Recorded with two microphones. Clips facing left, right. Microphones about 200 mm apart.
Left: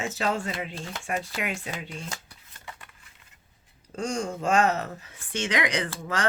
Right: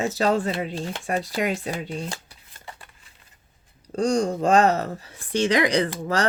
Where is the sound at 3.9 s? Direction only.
35° right (ahead or behind).